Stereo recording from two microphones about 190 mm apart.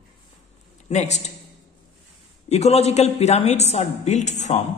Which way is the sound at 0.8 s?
35° left (ahead or behind).